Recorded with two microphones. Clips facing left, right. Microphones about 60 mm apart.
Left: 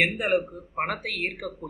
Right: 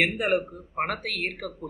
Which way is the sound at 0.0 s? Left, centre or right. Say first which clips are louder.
Even; centre.